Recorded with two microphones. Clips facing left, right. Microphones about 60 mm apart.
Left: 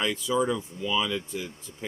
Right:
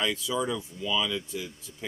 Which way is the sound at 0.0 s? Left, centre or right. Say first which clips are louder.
Left 3 dB; left.